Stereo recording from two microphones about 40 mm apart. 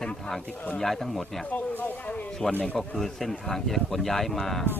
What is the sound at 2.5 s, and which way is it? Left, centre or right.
Speech, left.